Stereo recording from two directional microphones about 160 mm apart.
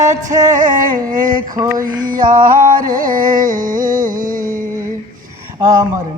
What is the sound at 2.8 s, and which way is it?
Music, 60° right (ahead or behind).